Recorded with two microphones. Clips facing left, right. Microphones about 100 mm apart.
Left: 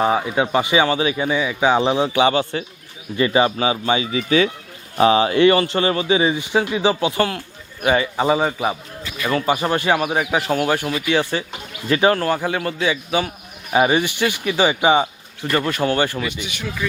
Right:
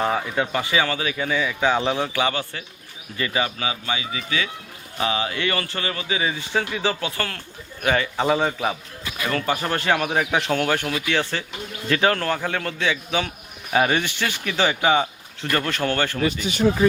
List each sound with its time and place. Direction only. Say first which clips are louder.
0.0 s speech: left 4 dB; 10° left (ahead or behind)
16.2 s speech: right 7 dB; 35° right (ahead or behind)